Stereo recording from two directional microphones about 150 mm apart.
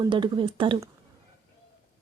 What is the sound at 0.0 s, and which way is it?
Speech, 35° right (ahead or behind).